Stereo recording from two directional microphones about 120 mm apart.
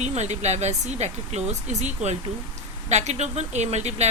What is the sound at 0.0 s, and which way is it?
Speech, 70° right (ahead or behind).